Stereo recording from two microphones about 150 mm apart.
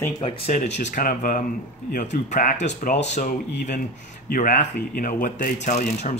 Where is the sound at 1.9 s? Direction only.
55° left (ahead or behind).